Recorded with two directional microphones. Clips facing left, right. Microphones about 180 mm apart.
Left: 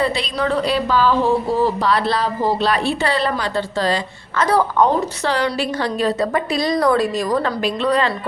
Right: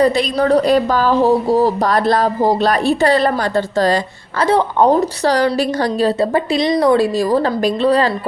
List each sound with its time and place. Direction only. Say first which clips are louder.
0.0 s a woman's voice: right 6 dB; 45° right (ahead or behind)
4.4 s a woman's voice: right 3 dB; 30° right (ahead or behind)